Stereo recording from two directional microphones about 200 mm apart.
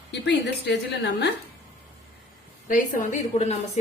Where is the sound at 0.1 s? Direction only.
60° left (ahead or behind).